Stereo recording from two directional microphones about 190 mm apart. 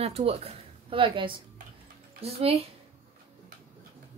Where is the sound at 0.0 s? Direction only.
35° right (ahead or behind).